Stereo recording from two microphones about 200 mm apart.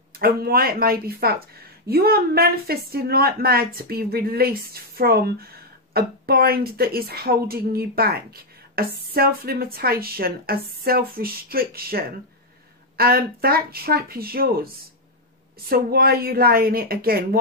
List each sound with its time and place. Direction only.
0.1 s a woman's voice: 50° right (ahead or behind)
15.7 s a woman's voice: 50° right (ahead or behind)